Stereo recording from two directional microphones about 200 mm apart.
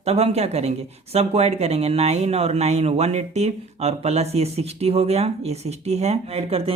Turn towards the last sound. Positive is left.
turn(degrees=-30)  # may be behind; listen again after turning